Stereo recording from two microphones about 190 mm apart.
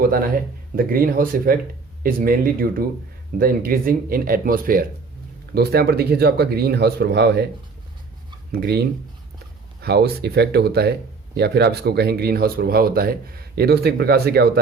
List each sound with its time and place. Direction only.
0.0 s speech: 50° right (ahead or behind)
8.6 s speech: 60° right (ahead or behind)